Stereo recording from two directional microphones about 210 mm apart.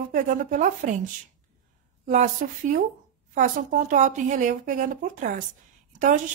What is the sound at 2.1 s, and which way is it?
A woman's voice, 40° right (ahead or behind).